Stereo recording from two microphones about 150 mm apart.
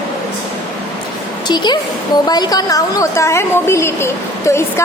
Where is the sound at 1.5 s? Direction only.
30° left (ahead or behind).